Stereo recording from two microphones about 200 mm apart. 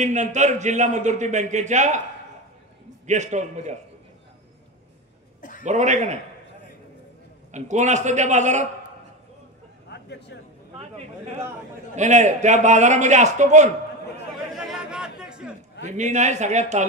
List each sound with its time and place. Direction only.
0.0 s a man's voice: 35° right (ahead or behind)
3.1 s a man's voice: 35° right (ahead or behind)
5.6 s a man's voice: 35° right (ahead or behind)
7.5 s a man's voice: 35° right (ahead or behind)
9.8 s a sound: 60° left (ahead or behind)
10.8 s a man's voice: 35° right (ahead or behind)
14.5 s chatter: centre (ahead or behind)
15.8 s a man's voice: 35° right (ahead or behind)